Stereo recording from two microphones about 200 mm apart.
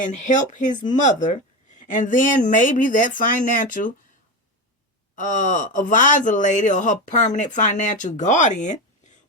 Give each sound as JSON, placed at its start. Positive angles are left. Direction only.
{"t": 0.0, "sound": "speech", "side_deg": 40}
{"t": 5.1, "sound": "speech", "side_deg": 40}